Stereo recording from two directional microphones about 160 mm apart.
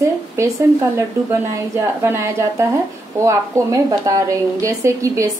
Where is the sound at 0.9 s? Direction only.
15° right (ahead or behind).